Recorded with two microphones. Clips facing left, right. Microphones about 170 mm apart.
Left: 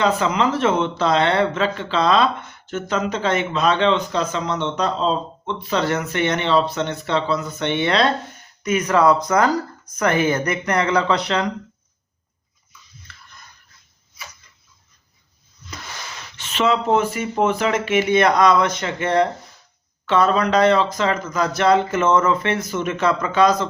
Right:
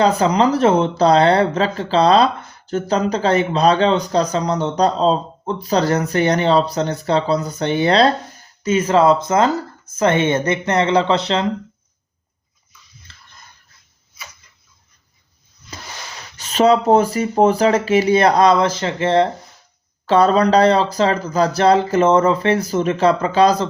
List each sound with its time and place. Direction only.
0.0 s speech: 35° right (ahead or behind)
13.1 s dog: 25° right (ahead or behind)
16.4 s speech: 40° right (ahead or behind)